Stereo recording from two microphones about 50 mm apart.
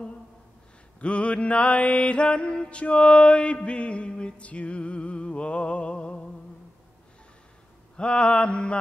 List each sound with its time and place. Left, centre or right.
1.0 s mantra: left
8.0 s mantra: left